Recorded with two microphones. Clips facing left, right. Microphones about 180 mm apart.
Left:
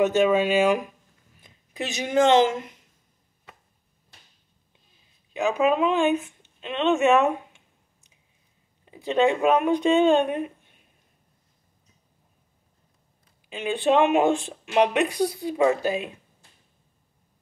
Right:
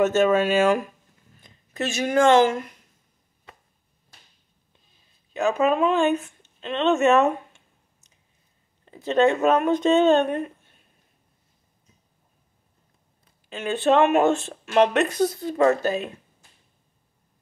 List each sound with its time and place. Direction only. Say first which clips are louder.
0.0 s speech: right 1 dB; 15° left (ahead or behind)
1.4 s a sound: right 4 dB; 15° left (ahead or behind)
2.3 s a woman's voice: right 1 dB; 20° left (ahead or behind)
5.3 s speech: right 1 dB; 15° left (ahead or behind)
13.5 s speech: right 1 dB; 15° left (ahead or behind)